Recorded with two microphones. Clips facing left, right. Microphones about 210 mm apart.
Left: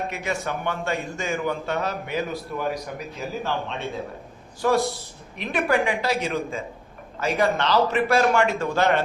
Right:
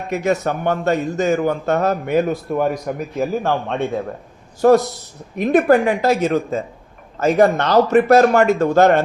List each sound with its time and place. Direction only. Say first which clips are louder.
0.1 s a man's voice: right 9 dB; 45° right (ahead or behind)